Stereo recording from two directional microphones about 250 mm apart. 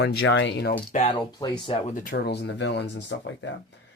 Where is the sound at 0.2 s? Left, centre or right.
Left.